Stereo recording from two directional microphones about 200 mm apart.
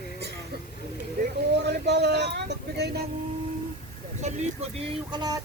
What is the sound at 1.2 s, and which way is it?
Vehicle, 55° right (ahead or behind).